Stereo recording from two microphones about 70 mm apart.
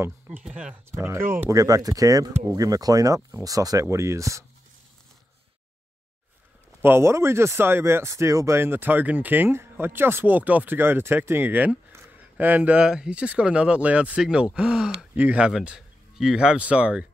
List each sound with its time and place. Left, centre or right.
0.3 s speech: centre
0.9 s speech: right
1.5 s speech: right
3.8 s speech: right
6.8 s speech: right
8.5 s speech: right
12.8 s speech: centre
15.1 s speech: right
15.4 s speech: centre